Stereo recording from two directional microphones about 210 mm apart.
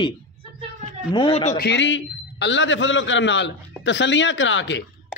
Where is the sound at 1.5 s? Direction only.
55° left (ahead or behind).